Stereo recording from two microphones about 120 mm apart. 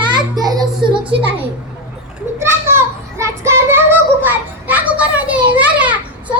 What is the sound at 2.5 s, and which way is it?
Child singing, 20° right (ahead or behind).